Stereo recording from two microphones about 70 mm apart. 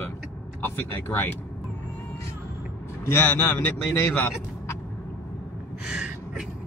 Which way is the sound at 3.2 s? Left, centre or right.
Left.